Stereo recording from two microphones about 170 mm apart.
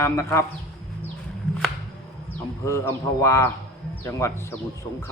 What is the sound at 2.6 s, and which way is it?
Speech, 15° left (ahead or behind).